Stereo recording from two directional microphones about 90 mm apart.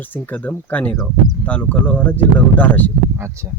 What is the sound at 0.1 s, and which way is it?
Speech, 20° left (ahead or behind).